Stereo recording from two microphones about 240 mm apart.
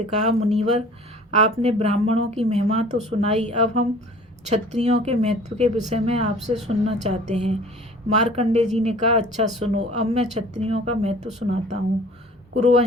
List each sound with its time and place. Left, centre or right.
0.1 s speech: right